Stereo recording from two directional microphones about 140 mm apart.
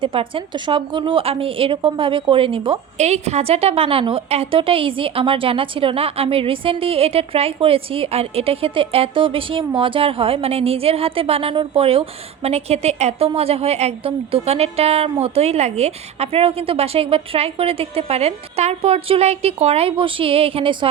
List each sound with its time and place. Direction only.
0.0 s a woman's voice: 40° right (ahead or behind)